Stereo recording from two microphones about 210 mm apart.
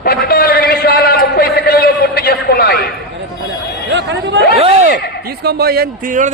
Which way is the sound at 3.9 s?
55° right (ahead or behind).